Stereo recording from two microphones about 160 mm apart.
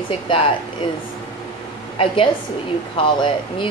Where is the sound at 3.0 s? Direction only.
30° left (ahead or behind).